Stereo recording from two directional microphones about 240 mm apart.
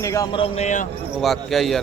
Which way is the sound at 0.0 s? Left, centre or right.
Centre.